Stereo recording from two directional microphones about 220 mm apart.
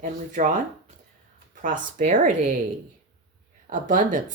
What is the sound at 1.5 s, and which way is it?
Speech, 35° right (ahead or behind).